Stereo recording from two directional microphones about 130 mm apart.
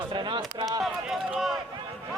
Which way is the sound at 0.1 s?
40° right (ahead or behind).